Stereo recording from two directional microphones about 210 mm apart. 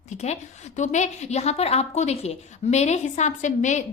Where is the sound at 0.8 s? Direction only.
35° left (ahead or behind).